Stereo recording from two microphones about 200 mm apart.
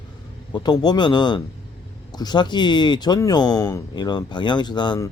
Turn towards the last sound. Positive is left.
turn(degrees=20)  # may be behind; listen again after turning